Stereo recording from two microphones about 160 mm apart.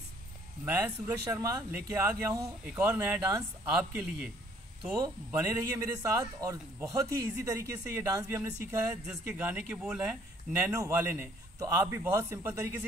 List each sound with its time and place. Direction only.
0.7 s speech: 10° right (ahead or behind)
4.9 s a man's voice: 20° right (ahead or behind)
9.0 s a man's voice: 5° right (ahead or behind)